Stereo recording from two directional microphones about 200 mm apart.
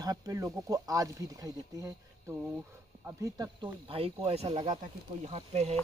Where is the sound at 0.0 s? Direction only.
15° right (ahead or behind).